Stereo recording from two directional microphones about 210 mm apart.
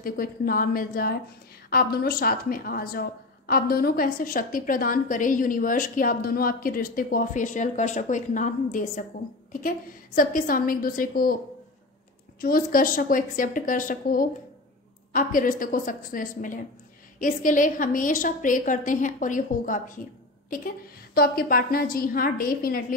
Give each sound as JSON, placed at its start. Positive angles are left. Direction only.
{"t": 0.0, "sound": "a woman's voice", "side_deg": 40}
{"t": 12.4, "sound": "a woman's voice", "side_deg": 45}